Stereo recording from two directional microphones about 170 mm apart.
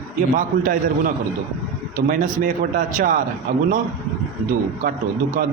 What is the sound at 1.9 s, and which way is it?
A man's voice, 50° right (ahead or behind).